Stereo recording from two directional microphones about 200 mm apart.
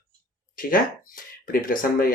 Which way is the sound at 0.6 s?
45° left (ahead or behind).